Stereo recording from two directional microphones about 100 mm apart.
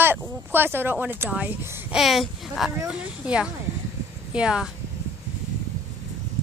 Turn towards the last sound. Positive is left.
turn(degrees=-10)  # may be behind; listen again after turning